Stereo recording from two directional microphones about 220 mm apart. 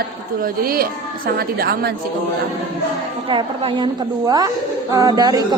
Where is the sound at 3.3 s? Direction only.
25° right (ahead or behind).